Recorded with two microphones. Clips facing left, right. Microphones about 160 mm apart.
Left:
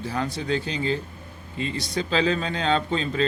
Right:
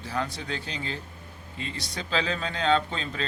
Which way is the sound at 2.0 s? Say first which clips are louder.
Left 6 dB; 35° left (ahead or behind).